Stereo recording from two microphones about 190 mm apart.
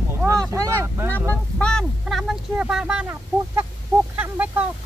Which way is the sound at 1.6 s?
5° left (ahead or behind).